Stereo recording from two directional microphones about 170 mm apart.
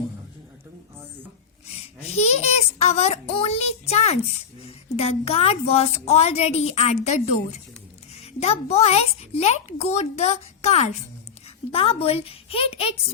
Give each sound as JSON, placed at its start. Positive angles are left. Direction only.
{"t": 1.6, "sound": "a woman's voice", "side_deg": 35}